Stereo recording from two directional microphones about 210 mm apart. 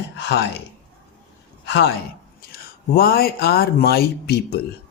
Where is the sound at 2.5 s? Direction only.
45° left (ahead or behind).